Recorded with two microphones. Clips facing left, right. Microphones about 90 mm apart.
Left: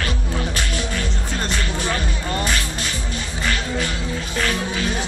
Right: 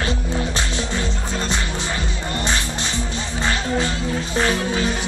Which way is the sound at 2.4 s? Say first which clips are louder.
Even; 25° right (ahead or behind).